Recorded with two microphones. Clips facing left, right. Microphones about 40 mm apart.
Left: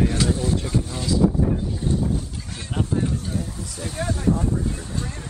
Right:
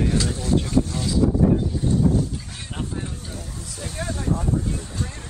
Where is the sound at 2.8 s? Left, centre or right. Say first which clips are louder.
Left 8 dB; centre.